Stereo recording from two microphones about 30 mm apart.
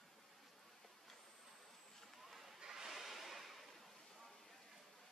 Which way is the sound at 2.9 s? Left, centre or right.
Centre.